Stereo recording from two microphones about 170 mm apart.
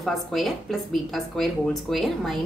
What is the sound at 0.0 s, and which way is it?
A woman's voice, centre (ahead or behind).